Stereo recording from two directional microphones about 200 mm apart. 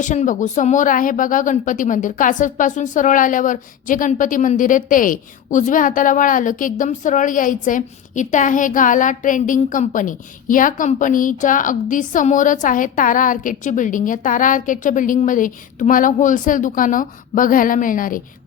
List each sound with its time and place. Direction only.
0.0 s speech: 40° left (ahead or behind)